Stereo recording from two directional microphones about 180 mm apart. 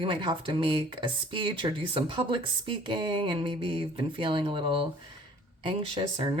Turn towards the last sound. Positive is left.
turn(degrees=-30)  # may be behind; listen again after turning